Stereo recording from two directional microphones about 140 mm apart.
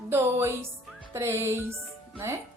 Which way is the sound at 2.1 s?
20° right (ahead or behind).